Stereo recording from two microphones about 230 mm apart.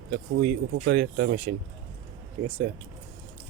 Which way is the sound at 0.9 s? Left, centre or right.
Right.